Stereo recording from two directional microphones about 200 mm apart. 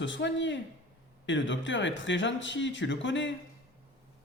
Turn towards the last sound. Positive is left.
turn(degrees=65)  # may be behind; listen again after turning